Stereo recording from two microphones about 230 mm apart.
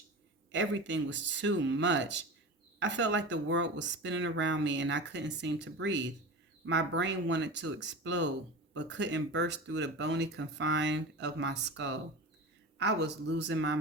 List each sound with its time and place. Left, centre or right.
0.5 s speech: right